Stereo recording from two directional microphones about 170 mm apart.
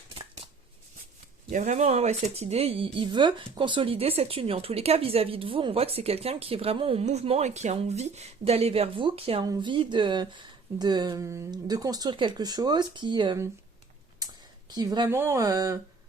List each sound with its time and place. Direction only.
1.5 s speech: 45° right (ahead or behind); by 13.4 s 25° right (ahead or behind)
14.8 s speech: 25° right (ahead or behind)